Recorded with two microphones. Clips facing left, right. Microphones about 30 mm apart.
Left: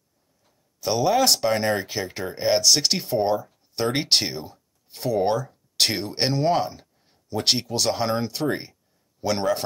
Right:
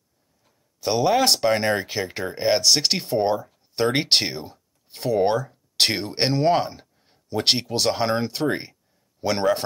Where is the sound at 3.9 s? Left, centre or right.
Right.